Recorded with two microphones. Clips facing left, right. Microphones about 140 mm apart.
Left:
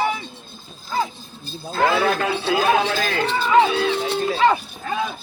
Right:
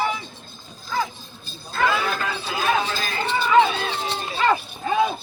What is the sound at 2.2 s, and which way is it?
Speech, 65° left (ahead or behind).